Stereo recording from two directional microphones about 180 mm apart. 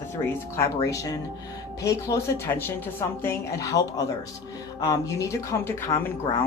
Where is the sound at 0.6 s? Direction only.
20° left (ahead or behind).